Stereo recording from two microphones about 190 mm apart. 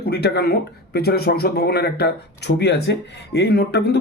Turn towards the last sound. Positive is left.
turn(degrees=60)  # may be behind; listen again after turning